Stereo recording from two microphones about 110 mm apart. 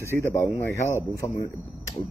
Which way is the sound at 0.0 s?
25° left (ahead or behind).